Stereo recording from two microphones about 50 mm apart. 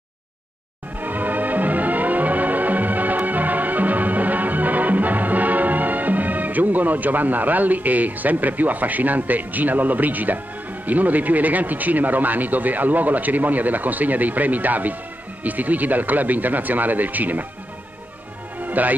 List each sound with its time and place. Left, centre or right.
1.0 s music: right
15.4 s speech: right
18.6 s music: right